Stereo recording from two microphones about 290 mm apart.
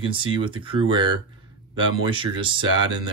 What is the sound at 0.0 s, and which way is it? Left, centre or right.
Speech, centre.